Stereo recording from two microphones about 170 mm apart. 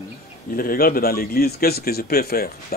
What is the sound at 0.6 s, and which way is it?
Speech, 60° left (ahead or behind).